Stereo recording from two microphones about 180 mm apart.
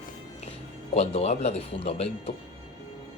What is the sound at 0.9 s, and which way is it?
Speech, 35° left (ahead or behind).